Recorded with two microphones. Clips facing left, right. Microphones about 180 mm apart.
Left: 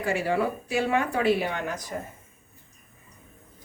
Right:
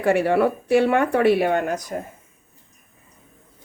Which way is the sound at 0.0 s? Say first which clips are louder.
Right 7 dB; 65° right (ahead or behind).